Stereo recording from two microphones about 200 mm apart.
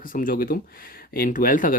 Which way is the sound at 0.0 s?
45° left (ahead or behind).